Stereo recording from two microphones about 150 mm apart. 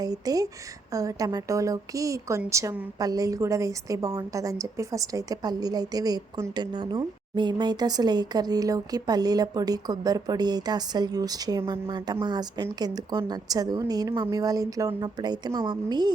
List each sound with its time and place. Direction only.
0.0 s a woman's voice: 25° right (ahead or behind)